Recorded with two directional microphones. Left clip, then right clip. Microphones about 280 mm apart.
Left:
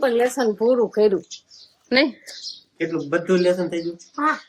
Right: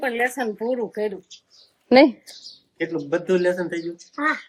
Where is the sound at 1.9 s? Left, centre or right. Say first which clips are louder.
Right 5 dB; centre.